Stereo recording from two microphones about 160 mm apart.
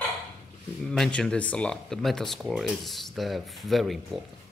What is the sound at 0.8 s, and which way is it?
Speech, 5° left (ahead or behind).